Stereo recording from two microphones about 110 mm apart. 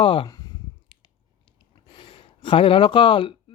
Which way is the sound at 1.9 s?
45° left (ahead or behind).